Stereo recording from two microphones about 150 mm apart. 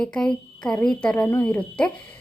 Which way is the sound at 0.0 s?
5° left (ahead or behind).